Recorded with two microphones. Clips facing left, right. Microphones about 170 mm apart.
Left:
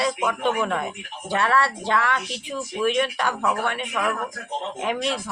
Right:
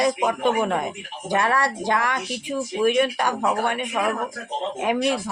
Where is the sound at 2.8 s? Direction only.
40° right (ahead or behind).